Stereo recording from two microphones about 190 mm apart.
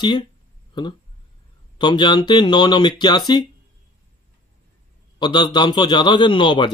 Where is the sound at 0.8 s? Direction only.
25° left (ahead or behind).